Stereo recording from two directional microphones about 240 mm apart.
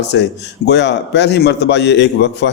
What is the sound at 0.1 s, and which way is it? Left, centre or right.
A man's voice, left.